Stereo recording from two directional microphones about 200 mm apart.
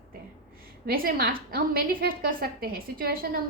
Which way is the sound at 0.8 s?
50° right (ahead or behind).